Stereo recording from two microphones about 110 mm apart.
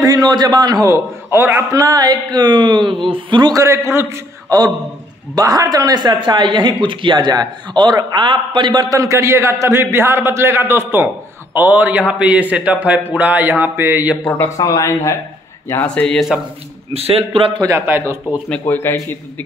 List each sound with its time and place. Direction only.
0.0 s a man's voice: 35° right (ahead or behind)
1.7 s a man's voice: 35° right (ahead or behind)
3.5 s a man's voice: 30° right (ahead or behind); by 8.8 s 45° right (ahead or behind)
8.8 s a man's voice: 30° right (ahead or behind)
14.2 s a man's voice: 20° left (ahead or behind)
15.8 s speech: 10° left (ahead or behind)
16.9 s a man's voice: 65° right (ahead or behind)
17.6 s speech: 20° right (ahead or behind)
18.5 s a man's voice: 20° left (ahead or behind)